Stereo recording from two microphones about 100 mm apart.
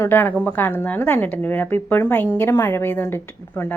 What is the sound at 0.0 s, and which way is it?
A woman's voice, 20° left (ahead or behind).